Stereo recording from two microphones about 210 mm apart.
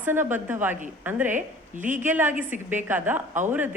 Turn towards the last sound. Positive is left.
turn(degrees=-10)  # may be behind; listen again after turning